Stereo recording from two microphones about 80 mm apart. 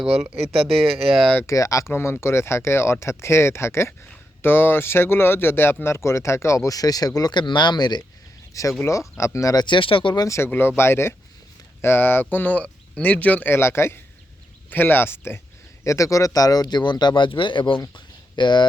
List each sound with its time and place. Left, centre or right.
0.0 s speech: centre
1.5 s speech: left
1.9 s a man's voice: left
7.2 s speech: left
8.8 s speech: left
9.6 s speech: left
10.2 s a man's voice: left
15.8 s speech: left
17.9 s speech: left